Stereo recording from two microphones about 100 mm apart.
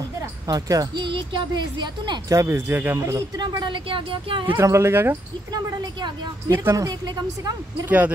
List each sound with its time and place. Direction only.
0.5 s speech: 40° right (ahead or behind)
1.0 s speech: 55° right (ahead or behind)
2.3 s speech: 30° right (ahead or behind)
3.3 s speech: 50° right (ahead or behind)
4.5 s speech: 25° right (ahead or behind)
5.5 s speech: 45° right (ahead or behind)
6.5 s speech: 25° right (ahead or behind)
6.9 s speech: 45° right (ahead or behind)